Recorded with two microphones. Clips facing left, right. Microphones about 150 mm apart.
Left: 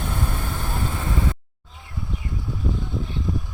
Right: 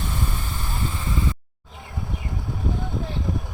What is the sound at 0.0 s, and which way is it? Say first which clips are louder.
Vehicle: left 2 dB; 60° left (ahead or behind).